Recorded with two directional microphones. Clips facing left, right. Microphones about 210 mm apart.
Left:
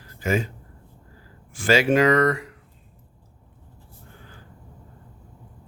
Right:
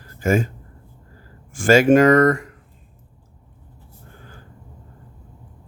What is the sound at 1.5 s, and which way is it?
Speech, 50° right (ahead or behind).